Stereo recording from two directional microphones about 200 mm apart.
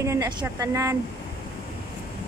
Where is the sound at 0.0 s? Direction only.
15° right (ahead or behind).